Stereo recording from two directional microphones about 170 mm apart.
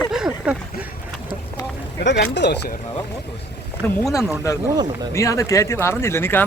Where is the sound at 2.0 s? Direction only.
90° left.